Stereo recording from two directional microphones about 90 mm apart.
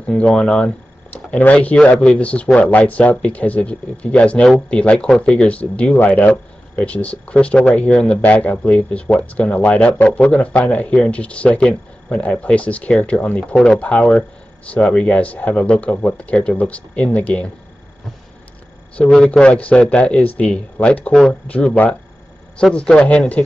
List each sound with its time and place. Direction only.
0.0 s speech: 15° left (ahead or behind)
18.9 s speech: 10° left (ahead or behind)
21.1 s speech: 5° left (ahead or behind)
21.5 s speech: 15° left (ahead or behind)